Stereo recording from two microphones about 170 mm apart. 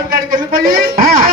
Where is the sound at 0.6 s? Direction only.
55° right (ahead or behind).